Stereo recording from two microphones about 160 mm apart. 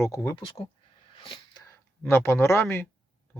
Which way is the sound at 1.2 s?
30° left (ahead or behind).